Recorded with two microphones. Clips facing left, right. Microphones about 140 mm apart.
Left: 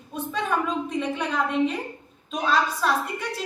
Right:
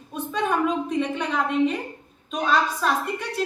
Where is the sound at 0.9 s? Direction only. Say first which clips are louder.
Right 2 dB; centre (ahead or behind).